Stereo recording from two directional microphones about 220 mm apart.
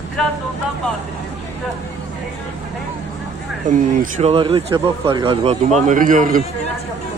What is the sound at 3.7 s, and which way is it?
Speech, 30° right (ahead or behind).